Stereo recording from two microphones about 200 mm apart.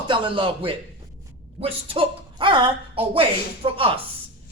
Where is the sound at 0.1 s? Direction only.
25° right (ahead or behind).